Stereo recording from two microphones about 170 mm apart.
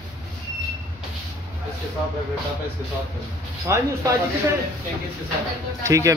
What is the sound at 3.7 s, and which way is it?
Speech, 15° right (ahead or behind).